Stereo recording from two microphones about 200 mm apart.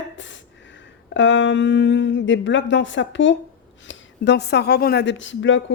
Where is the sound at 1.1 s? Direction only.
65° left (ahead or behind).